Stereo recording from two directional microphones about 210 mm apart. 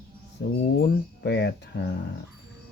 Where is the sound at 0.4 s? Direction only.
50° left (ahead or behind).